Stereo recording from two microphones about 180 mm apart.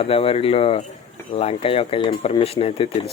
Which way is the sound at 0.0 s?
30° left (ahead or behind).